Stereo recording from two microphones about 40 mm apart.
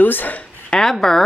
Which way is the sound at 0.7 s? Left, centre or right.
Centre.